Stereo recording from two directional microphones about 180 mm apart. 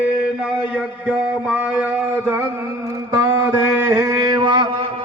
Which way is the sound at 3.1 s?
10° right (ahead or behind).